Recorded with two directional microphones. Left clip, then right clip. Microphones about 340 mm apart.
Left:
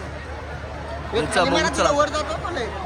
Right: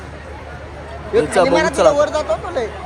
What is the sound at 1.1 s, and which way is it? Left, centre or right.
Speech, centre.